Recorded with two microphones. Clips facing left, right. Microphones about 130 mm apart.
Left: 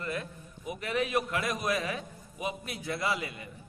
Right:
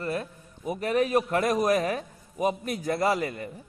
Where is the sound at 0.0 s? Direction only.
40° right (ahead or behind).